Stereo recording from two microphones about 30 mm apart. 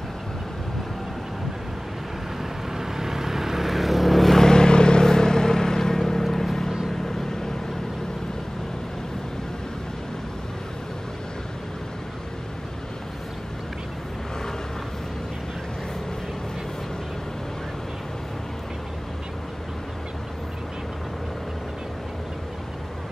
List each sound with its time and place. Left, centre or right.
2.8 s vehicle: centre
4.4 s vehicle: left